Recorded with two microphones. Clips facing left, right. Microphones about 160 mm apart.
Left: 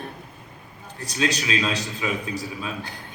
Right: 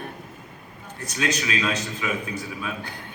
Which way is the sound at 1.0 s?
30° left (ahead or behind).